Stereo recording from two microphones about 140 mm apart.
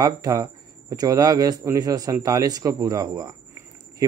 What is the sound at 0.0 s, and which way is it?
Speech, 25° right (ahead or behind).